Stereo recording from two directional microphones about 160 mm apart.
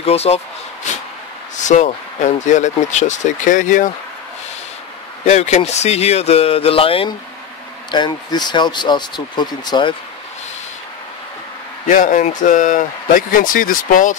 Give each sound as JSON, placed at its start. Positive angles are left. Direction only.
{"t": 0.0, "sound": "speech", "side_deg": 40}
{"t": 1.6, "sound": "speech", "side_deg": 50}
{"t": 5.2, "sound": "speech", "side_deg": 45}
{"t": 11.9, "sound": "speech", "side_deg": 55}